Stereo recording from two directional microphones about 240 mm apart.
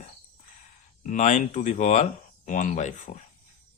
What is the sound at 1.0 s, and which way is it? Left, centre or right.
Speech, left.